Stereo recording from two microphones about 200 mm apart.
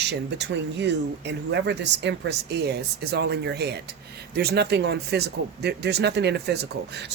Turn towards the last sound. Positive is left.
turn(degrees=-55)  # may be behind; listen again after turning